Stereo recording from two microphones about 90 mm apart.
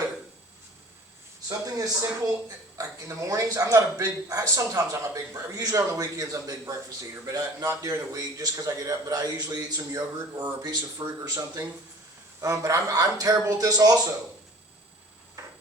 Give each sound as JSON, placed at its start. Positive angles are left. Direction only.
{"t": 1.5, "sound": "a man's voice", "side_deg": -45}
{"t": 11.2, "sound": "a man's voice", "side_deg": -35}